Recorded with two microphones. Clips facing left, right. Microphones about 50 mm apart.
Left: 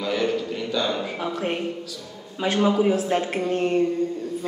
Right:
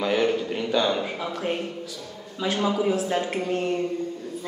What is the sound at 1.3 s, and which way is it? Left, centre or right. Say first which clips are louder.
Speech: left 1 dB; left.